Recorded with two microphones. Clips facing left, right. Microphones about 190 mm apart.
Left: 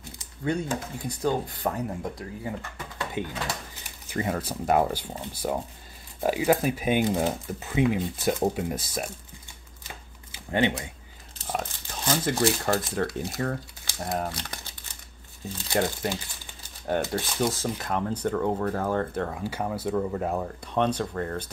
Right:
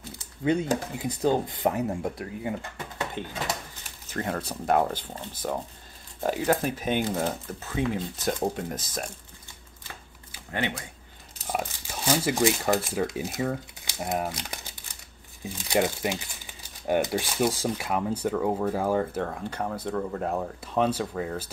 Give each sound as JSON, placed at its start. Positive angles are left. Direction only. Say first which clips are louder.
{"t": 0.9, "sound": "speech", "louder": "right 1 dB", "side_deg": -20}
{"t": 3.2, "sound": "speech", "louder": "left 4 dB", "side_deg": 10}
{"t": 10.3, "sound": "speech", "louder": "left 6 dB", "side_deg": 25}
{"t": 11.4, "sound": "speech", "louder": "right 1 dB", "side_deg": -10}